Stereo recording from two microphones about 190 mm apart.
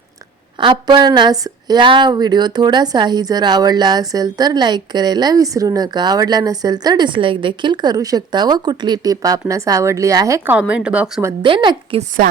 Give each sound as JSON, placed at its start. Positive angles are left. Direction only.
{"t": 0.6, "sound": "a woman's voice", "side_deg": -25}
{"t": 11.4, "sound": "a woman's voice", "side_deg": -25}